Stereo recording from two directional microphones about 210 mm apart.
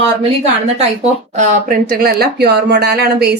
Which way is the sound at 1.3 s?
35° right (ahead or behind).